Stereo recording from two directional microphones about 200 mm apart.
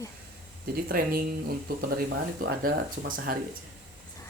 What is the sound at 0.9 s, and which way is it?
Speech, 45° right (ahead or behind).